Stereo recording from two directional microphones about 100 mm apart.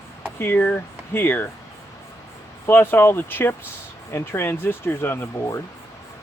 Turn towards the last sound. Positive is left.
turn(degrees=25)  # may be behind; listen again after turning